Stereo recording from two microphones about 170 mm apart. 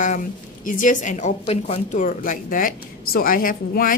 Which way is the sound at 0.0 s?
50° left (ahead or behind).